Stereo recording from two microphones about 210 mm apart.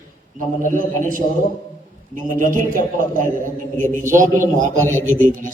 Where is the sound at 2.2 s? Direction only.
40° right (ahead or behind).